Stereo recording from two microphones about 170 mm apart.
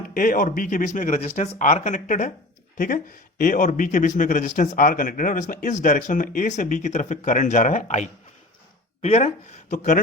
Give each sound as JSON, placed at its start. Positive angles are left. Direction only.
{"t": 0.1, "sound": "speech", "side_deg": 55}